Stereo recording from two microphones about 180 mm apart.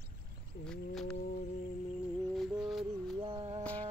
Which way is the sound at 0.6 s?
5° left (ahead or behind).